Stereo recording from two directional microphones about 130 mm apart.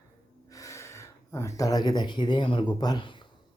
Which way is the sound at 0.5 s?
25° left (ahead or behind).